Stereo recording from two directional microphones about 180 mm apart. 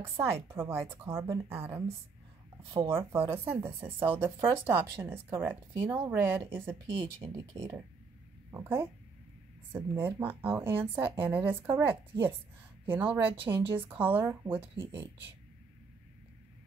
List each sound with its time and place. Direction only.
0.0 s speech: 15° right (ahead or behind)
2.9 s speech: 15° right (ahead or behind)
6.9 s speech: 30° right (ahead or behind)
7.3 s speech: 15° right (ahead or behind)